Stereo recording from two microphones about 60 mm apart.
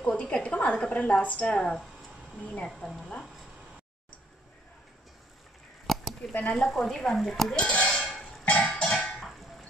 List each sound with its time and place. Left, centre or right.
0.1 s a woman's voice: centre
5.9 s a sound: centre
6.5 s speech: centre
7.5 s a woman's voice: centre
8.0 s a sound: centre
8.5 s music: left